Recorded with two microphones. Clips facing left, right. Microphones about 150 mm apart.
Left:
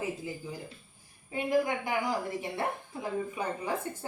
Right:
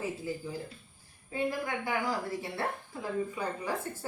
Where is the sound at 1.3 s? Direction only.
20° left (ahead or behind).